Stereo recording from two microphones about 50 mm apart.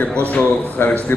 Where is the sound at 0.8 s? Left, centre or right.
Left.